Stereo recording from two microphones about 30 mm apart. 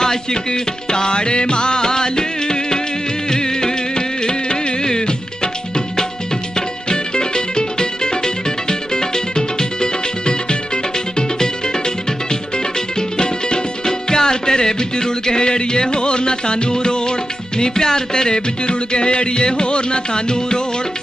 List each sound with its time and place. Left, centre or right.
0.0 s music: left
13.0 s music: left